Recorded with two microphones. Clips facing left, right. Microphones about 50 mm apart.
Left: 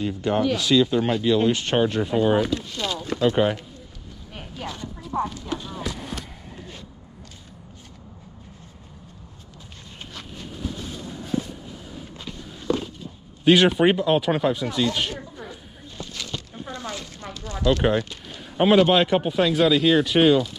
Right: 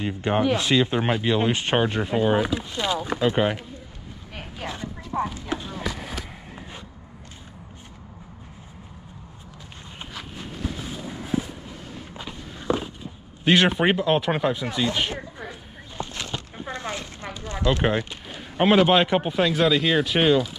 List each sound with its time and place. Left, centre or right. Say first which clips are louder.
0.0 s speech: even; right
4.4 s a sound: even; right
5.2 s clip-clop: even; centre
5.9 s fireworks: right 2 dB; centre
6.5 s a sound: left 1 dB; centre
10.1 s walk: right 1 dB; centre
13.4 s speech: left 3 dB; centre
16.0 s a sound: right 2 dB; right
17.6 s speech: left 2 dB; centre